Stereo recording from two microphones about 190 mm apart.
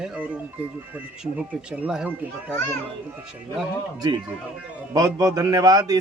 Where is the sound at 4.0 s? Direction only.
20° right (ahead or behind).